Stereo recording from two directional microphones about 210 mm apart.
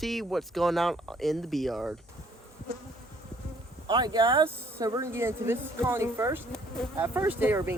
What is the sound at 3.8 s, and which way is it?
Speech, 20° right (ahead or behind).